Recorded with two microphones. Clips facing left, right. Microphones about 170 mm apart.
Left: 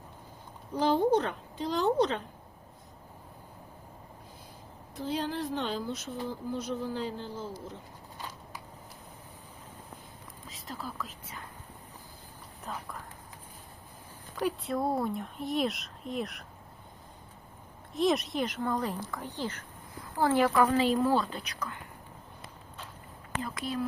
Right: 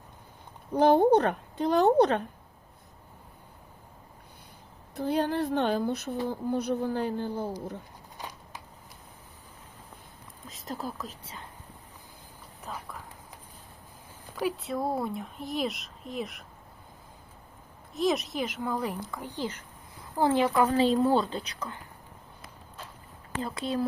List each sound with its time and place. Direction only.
0.7 s speech: 60° right (ahead or behind)
4.9 s speech: 60° right (ahead or behind)
10.5 s speech: 40° right (ahead or behind)
12.7 s speech: 5° right (ahead or behind)
14.3 s speech: 5° right (ahead or behind)
17.9 s a woman's voice: centre (ahead or behind); by 21.8 s 30° right (ahead or behind)
23.4 s a woman's voice: 30° right (ahead or behind)